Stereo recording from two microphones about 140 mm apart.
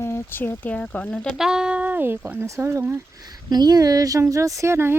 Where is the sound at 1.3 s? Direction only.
5° right (ahead or behind).